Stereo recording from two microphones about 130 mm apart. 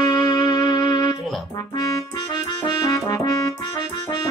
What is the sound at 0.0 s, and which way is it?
Music, 35° left (ahead or behind).